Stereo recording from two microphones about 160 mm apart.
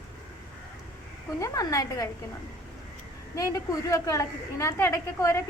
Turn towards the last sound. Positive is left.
turn(degrees=20)  # may be behind; listen again after turning